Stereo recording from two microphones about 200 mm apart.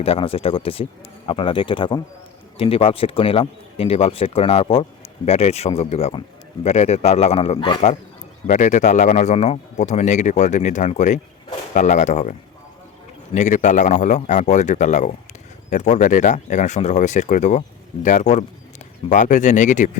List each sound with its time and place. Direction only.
0.0 s speech: 30° left (ahead or behind)